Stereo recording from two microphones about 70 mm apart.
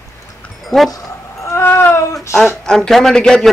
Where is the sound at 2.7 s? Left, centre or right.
Centre.